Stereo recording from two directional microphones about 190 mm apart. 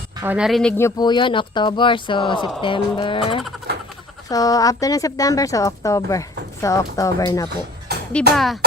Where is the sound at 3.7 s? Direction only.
55° right (ahead or behind).